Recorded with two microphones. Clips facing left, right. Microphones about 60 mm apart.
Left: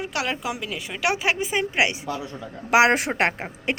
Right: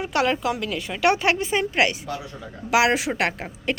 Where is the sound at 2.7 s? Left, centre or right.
Left.